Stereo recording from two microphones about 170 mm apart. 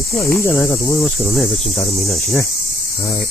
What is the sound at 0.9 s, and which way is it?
Cricket, centre (ahead or behind).